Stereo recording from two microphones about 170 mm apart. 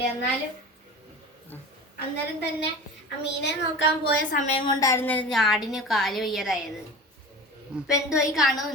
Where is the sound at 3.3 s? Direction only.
90° left.